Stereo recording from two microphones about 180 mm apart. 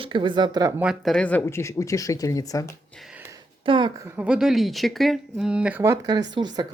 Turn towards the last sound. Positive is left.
turn(degrees=-25)  # may be behind; listen again after turning